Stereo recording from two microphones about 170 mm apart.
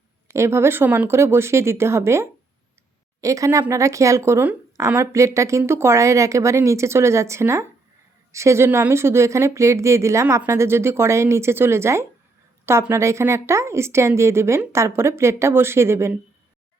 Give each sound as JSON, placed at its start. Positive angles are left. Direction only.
{"t": 0.3, "sound": "speech", "side_deg": -15}